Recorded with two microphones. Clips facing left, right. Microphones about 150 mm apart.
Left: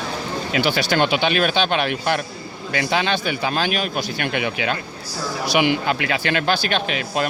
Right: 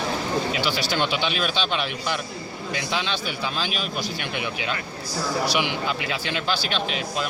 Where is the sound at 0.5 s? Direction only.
60° left (ahead or behind).